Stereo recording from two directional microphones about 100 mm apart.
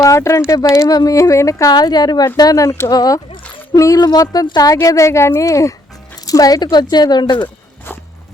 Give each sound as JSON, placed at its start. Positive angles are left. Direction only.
{"t": 0.0, "sound": "speech", "side_deg": 30}
{"t": 1.7, "sound": "speech", "side_deg": 45}
{"t": 2.9, "sound": "speech", "side_deg": 40}